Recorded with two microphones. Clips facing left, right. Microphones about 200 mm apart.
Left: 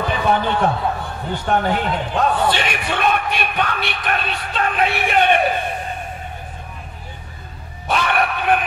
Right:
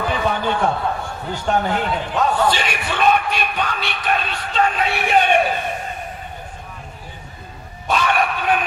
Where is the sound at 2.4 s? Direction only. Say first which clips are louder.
Even; 55° left (ahead or behind).